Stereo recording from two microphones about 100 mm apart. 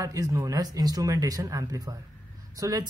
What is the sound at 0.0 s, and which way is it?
Speech, 35° right (ahead or behind).